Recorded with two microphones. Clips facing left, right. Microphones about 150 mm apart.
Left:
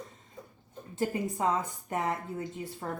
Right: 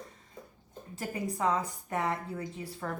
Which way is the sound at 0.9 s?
25° left (ahead or behind).